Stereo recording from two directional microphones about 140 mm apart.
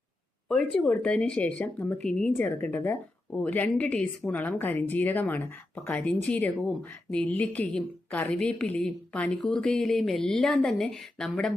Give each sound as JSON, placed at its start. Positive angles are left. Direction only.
{"t": 0.4, "sound": "a woman's voice", "side_deg": 5}